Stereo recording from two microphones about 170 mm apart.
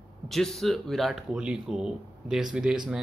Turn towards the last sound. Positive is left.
turn(degrees=-5)  # may be behind; listen again after turning